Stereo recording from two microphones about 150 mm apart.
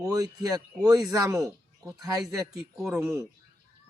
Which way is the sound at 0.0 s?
25° right (ahead or behind).